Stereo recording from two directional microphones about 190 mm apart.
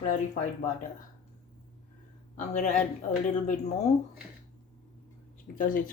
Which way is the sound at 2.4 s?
40° left (ahead or behind).